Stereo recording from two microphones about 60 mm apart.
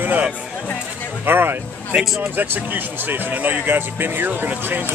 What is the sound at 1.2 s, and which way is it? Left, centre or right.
Speech, right.